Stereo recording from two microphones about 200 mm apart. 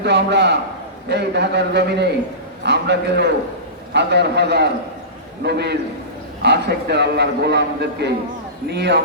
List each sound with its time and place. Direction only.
0.0 s a man's voice: 55° right (ahead or behind)